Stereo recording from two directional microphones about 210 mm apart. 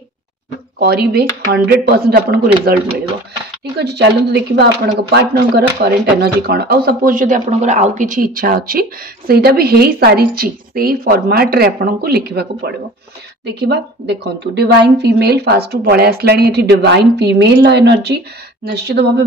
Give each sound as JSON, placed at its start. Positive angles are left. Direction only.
{"t": 0.7, "sound": "speech", "side_deg": -50}